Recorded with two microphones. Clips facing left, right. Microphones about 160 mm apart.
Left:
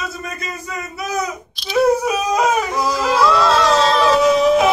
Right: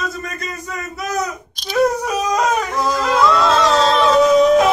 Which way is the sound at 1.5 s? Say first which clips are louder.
Left 5 dB; 45° right (ahead or behind).